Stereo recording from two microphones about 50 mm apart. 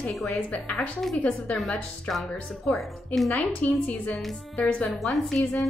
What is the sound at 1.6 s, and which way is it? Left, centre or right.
A woman's voice, centre.